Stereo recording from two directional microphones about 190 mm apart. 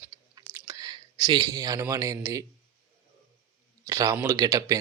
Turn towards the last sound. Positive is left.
turn(degrees=-20)  # may be behind; listen again after turning